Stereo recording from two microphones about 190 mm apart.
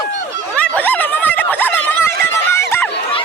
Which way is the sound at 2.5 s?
15° left (ahead or behind).